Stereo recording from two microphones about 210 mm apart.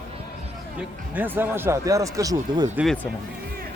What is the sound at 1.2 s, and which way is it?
Speech, 10° right (ahead or behind).